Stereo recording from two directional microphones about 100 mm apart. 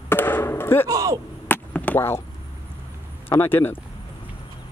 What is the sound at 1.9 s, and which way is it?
Speech, 25° left (ahead or behind).